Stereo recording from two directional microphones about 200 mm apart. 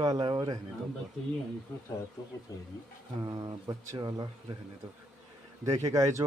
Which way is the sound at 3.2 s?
20° right (ahead or behind).